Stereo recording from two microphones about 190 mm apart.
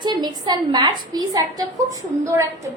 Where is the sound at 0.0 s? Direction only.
20° right (ahead or behind).